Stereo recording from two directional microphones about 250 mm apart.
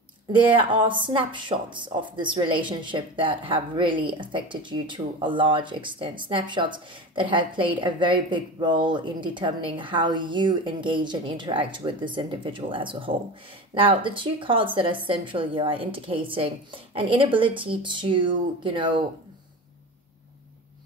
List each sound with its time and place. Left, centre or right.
0.6 s speech: centre